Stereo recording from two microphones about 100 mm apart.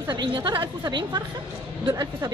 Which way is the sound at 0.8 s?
45° right (ahead or behind).